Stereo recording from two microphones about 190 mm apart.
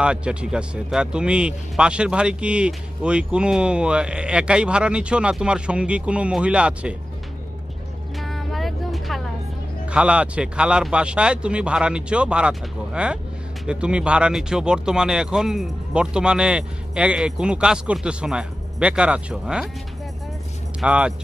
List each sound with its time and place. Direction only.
0.0 s speech: 5° right (ahead or behind)
8.2 s music: centre (ahead or behind)
9.8 s speech: 5° right (ahead or behind)
20.8 s speech: 5° right (ahead or behind)